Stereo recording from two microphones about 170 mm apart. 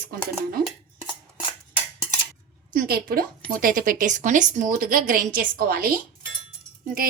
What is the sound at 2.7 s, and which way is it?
A woman's voice, 60° right (ahead or behind).